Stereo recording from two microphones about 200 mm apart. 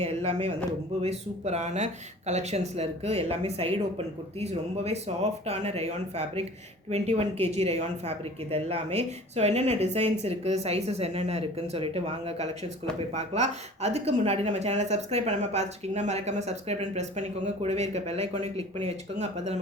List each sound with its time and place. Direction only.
0.0 s speech: 30° right (ahead or behind)